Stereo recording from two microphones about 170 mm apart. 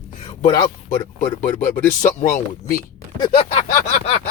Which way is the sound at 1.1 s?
50° left (ahead or behind).